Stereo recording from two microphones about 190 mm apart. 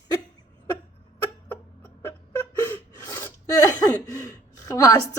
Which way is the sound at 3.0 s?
20° left (ahead or behind).